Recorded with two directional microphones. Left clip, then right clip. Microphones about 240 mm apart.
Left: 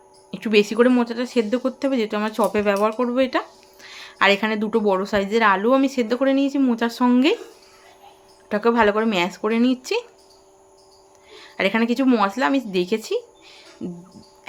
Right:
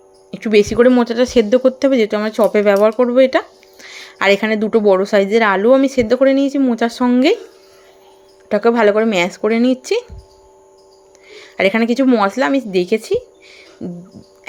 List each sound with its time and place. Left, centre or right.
0.3 s speech: centre
8.4 s speech: centre
11.3 s a woman's voice: right